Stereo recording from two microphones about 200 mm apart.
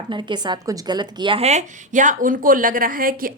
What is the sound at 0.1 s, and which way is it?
A woman's voice, 25° right (ahead or behind).